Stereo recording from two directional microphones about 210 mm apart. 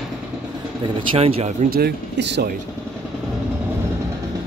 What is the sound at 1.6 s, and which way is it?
Speech, 50° right (ahead or behind).